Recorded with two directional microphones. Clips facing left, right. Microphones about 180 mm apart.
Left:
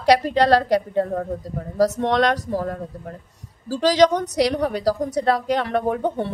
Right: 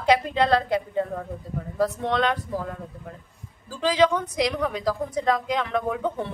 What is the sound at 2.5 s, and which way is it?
A woman's voice, 40° left (ahead or behind).